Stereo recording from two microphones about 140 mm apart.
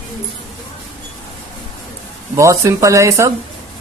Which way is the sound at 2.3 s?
20° right (ahead or behind).